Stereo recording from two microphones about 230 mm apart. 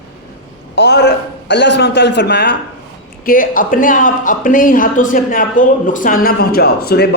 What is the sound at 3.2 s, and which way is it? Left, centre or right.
A man's voice, left.